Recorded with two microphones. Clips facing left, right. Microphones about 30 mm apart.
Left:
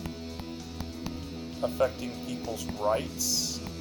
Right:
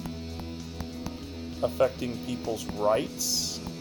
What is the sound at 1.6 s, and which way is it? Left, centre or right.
Speech, centre.